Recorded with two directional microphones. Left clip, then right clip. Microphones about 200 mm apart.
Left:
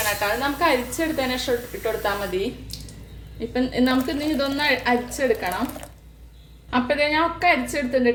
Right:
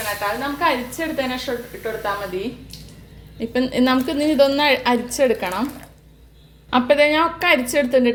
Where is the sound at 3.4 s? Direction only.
40° right (ahead or behind).